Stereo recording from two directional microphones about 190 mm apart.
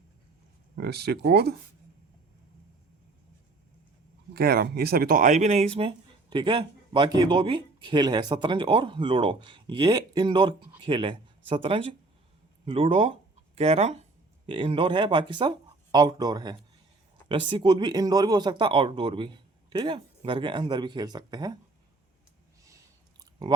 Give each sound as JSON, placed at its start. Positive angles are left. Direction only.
{"t": 0.8, "sound": "speech", "side_deg": -55}
{"t": 4.4, "sound": "speech", "side_deg": -55}